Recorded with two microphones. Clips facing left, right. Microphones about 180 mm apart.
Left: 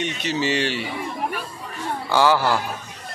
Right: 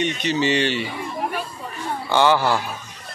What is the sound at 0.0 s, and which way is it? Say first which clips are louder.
Speech: right 3 dB; 5° left (ahead or behind).